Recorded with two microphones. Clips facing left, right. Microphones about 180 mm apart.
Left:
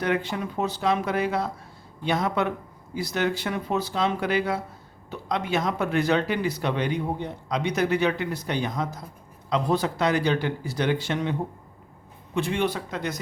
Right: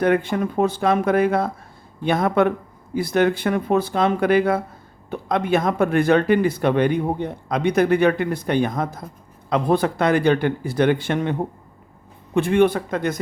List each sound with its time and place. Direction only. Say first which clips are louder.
0.0 s speech: right 7 dB; 50° right (ahead or behind)